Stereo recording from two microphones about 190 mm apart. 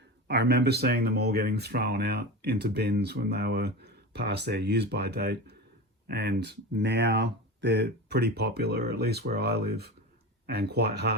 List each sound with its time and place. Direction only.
0.3 s speech: 60° right (ahead or behind)